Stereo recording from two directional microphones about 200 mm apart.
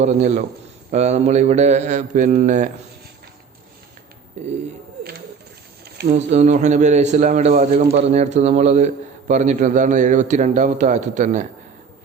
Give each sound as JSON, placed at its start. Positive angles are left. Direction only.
{"t": 0.0, "sound": "a man's voice", "side_deg": -35}
{"t": 6.1, "sound": "a man's voice", "side_deg": -35}